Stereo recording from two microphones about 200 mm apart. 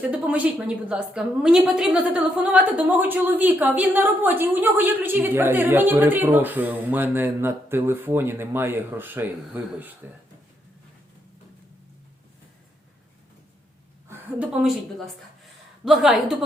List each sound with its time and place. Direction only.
0.1 s a woman's voice: 10° right (ahead or behind)
14.1 s a woman's voice: 5° right (ahead or behind)